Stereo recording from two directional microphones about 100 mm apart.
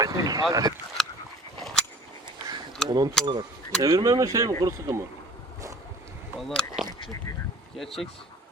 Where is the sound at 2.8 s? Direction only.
45° right (ahead or behind); by 5.1 s 25° right (ahead or behind).